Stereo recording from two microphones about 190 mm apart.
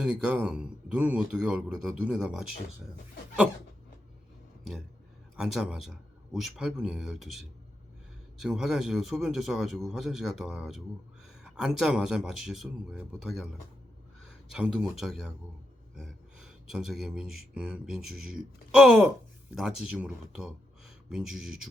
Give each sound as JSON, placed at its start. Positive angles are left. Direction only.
{"t": 0.0, "sound": "a man's voice", "side_deg": -5}
{"t": 5.4, "sound": "a man's voice", "side_deg": 0}
{"t": 14.5, "sound": "a man's voice", "side_deg": -5}